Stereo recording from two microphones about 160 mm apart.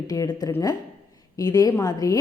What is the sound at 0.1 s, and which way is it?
A woman's voice, 25° left (ahead or behind).